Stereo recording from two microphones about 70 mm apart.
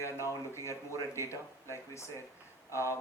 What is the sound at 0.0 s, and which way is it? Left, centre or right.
Speech, left.